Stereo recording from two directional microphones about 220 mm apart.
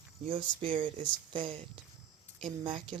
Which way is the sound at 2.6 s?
25° right (ahead or behind).